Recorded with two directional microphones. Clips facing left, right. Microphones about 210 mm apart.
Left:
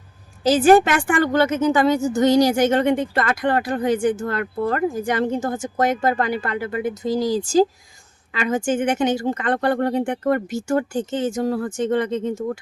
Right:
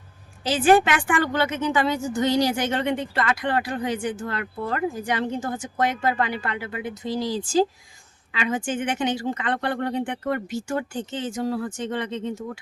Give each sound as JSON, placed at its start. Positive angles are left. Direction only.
{"t": 0.4, "sound": "a woman's voice", "side_deg": 40}